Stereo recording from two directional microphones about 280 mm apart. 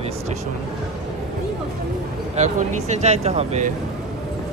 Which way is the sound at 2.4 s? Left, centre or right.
Right.